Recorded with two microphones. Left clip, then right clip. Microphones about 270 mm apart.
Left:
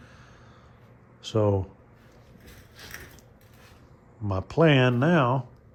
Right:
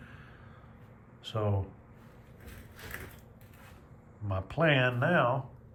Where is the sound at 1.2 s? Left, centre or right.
Left.